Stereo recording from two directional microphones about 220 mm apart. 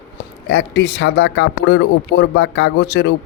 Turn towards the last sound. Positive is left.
turn(degrees=50)  # may be behind; listen again after turning